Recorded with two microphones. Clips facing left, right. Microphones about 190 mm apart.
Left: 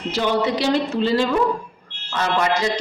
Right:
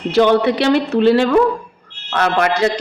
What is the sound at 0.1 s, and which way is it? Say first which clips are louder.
A woman's voice: right 8 dB; 60° right (ahead or behind).